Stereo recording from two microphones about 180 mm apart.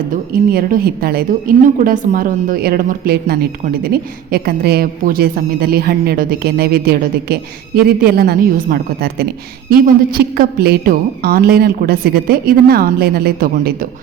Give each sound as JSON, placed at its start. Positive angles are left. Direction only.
{"t": 0.1, "sound": "a woman's voice", "side_deg": -50}